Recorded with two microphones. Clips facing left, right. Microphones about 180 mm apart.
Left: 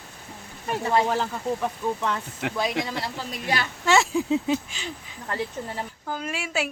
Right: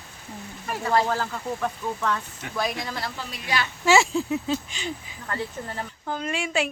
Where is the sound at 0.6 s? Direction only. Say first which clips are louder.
Left 1 dB; 20° left (ahead or behind).